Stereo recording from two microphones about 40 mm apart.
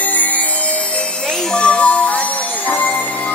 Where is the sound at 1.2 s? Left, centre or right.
Left.